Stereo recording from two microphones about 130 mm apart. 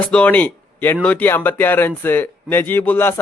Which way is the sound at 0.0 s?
10° left (ahead or behind).